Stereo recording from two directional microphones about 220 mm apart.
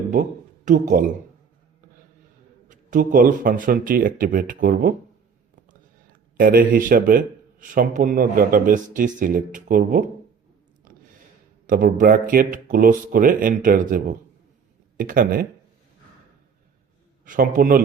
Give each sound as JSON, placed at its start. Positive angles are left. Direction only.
{"t": 0.1, "sound": "speech", "side_deg": -35}
{"t": 2.6, "sound": "speech", "side_deg": -35}
{"t": 6.3, "sound": "speech", "side_deg": -40}
{"t": 11.6, "sound": "speech", "side_deg": -40}
{"t": 17.2, "sound": "speech", "side_deg": -35}